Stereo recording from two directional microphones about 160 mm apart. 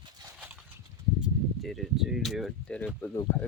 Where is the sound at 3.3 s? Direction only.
15° left (ahead or behind).